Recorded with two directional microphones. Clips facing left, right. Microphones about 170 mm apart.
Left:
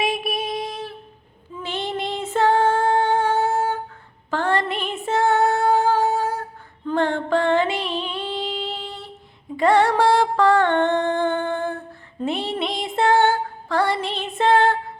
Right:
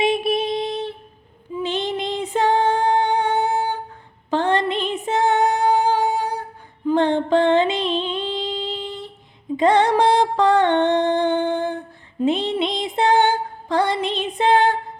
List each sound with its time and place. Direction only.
0.0 s a sound: 25° right (ahead or behind)
1.5 s female singing: 20° right (ahead or behind)
6.8 s music: 20° right (ahead or behind)